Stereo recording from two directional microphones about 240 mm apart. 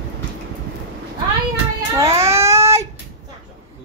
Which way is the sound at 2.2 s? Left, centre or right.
Centre.